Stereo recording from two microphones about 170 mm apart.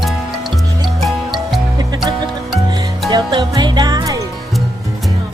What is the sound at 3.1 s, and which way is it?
Music, 25° right (ahead or behind).